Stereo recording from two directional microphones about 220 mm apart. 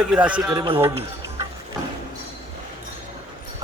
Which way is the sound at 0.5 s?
20° right (ahead or behind).